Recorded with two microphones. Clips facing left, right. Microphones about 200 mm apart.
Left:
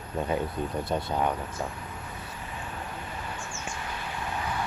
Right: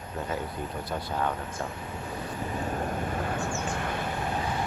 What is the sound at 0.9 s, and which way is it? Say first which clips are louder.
Speech: left 2 dB; 25° left (ahead or behind).